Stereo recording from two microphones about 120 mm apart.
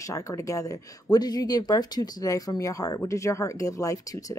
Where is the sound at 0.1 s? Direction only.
25° left (ahead or behind).